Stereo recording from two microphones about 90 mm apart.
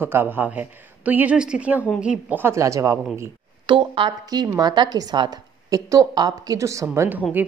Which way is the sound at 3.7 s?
65° right (ahead or behind).